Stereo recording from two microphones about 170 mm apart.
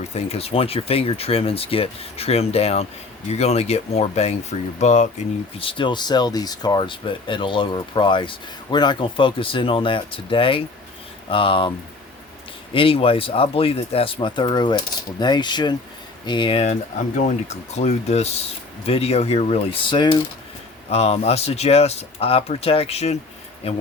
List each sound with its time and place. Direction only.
0.0 s speech: 40° left (ahead or behind)
5.5 s speech: 30° left (ahead or behind)
12.7 s speech: 35° left (ahead or behind)
20.9 s speech: 40° left (ahead or behind)